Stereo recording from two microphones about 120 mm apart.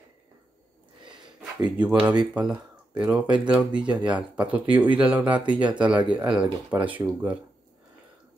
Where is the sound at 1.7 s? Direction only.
10° right (ahead or behind).